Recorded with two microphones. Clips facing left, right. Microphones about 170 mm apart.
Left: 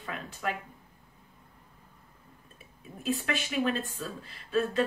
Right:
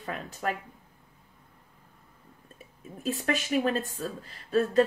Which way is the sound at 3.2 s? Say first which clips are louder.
Right 7 dB; 40° right (ahead or behind).